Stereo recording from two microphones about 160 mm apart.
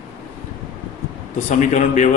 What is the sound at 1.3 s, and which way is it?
Speech, 50° left (ahead or behind).